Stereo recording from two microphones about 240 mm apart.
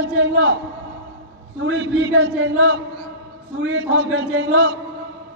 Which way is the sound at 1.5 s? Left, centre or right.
Right.